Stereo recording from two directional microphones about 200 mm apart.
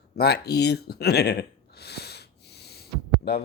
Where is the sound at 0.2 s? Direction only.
55° left (ahead or behind).